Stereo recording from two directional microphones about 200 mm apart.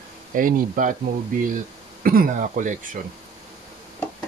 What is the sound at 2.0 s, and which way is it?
Speech, 45° right (ahead or behind).